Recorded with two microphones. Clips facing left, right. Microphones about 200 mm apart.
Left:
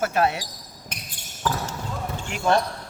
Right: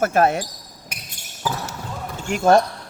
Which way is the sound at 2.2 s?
45° right (ahead or behind).